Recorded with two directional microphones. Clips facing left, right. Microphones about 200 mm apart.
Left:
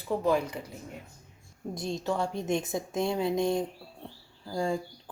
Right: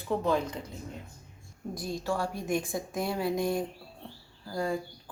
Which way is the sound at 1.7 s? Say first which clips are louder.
Left 1 dB; 25° left (ahead or behind).